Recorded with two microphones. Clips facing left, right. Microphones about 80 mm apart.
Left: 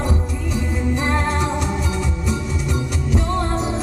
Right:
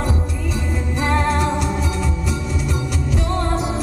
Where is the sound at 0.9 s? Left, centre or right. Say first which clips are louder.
Right 4 dB; centre.